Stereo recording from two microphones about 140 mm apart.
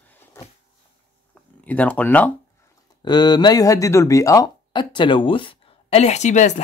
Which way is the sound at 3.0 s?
30° left (ahead or behind).